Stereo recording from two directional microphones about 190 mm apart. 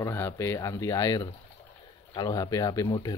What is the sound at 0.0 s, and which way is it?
Speech, 15° left (ahead or behind).